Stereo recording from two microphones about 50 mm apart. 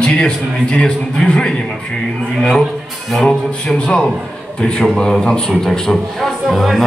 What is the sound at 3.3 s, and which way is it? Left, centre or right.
A man's voice, centre.